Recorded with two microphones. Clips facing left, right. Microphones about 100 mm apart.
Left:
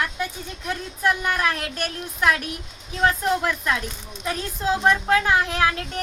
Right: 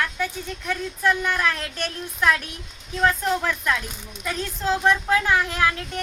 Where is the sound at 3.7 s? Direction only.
25° left (ahead or behind).